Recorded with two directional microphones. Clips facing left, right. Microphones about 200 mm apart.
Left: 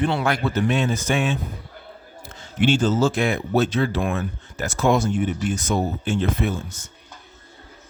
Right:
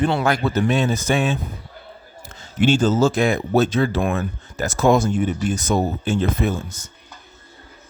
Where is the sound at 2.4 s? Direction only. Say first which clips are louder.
Right 2 dB; 40° right (ahead or behind).